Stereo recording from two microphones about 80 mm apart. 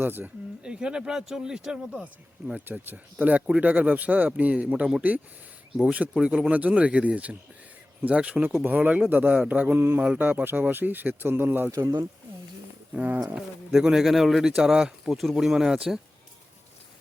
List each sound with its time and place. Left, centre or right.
0.0 s speech: right
0.6 s speech: centre
2.6 s speech: right
12.9 s speech: centre
13.2 s speech: centre